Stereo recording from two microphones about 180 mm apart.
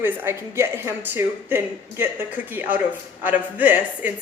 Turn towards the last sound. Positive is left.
turn(degrees=-10)  # may be behind; listen again after turning